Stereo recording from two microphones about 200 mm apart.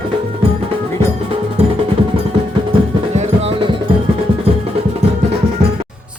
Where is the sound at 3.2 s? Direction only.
30° right (ahead or behind).